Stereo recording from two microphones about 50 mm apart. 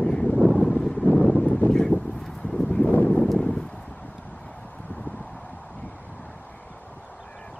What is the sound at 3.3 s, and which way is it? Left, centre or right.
Clip-clop, centre.